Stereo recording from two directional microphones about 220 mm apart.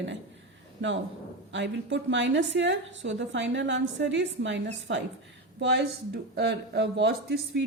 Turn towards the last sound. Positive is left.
turn(degrees=-55)  # may be behind; listen again after turning